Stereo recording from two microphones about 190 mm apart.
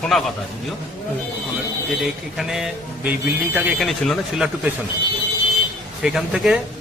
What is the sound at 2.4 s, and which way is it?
Speech, 5° right (ahead or behind).